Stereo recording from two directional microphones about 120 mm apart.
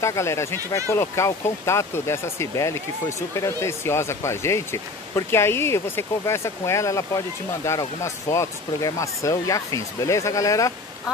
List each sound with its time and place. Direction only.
0.0 s speech: 25° left (ahead or behind)